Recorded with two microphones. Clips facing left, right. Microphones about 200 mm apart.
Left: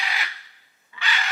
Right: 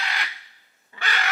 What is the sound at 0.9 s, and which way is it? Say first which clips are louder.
Crow: right 1 dB; 50° right (ahead or behind).